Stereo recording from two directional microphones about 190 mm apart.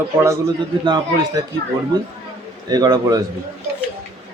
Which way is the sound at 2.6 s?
20° right (ahead or behind).